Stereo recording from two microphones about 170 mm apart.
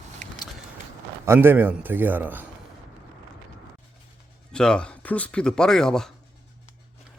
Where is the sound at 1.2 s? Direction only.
15° right (ahead or behind).